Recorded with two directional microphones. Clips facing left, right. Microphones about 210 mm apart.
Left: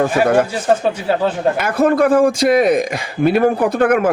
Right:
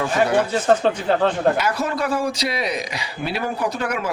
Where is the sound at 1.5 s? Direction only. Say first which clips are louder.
Left 8 dB; 55° left (ahead or behind).